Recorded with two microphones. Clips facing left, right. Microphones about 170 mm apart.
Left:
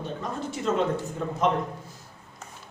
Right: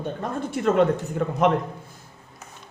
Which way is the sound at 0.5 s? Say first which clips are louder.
Right 6 dB; 60° right (ahead or behind).